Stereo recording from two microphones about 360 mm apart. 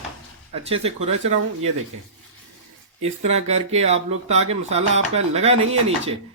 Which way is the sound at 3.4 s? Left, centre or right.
Centre.